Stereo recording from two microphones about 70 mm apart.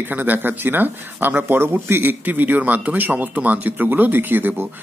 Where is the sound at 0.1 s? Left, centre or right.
Right.